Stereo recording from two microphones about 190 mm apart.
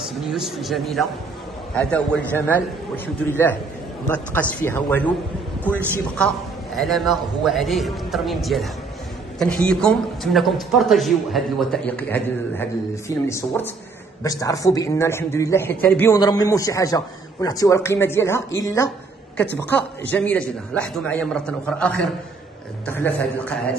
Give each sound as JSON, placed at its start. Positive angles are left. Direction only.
{"t": 0.3, "sound": "a man's voice", "side_deg": 0}
{"t": 6.1, "sound": "a man's voice", "side_deg": 0}